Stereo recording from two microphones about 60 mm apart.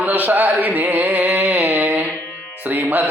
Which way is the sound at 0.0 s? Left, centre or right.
Right.